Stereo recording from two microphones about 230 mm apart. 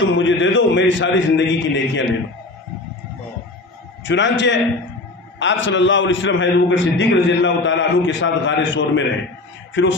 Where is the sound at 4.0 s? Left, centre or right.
Left.